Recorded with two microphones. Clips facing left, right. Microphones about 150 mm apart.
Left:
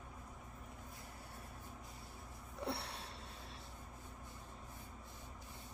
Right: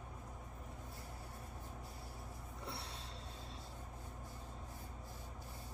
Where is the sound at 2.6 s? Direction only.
65° left (ahead or behind).